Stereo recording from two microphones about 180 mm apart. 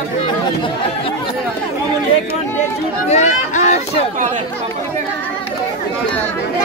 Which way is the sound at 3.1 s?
40° left (ahead or behind).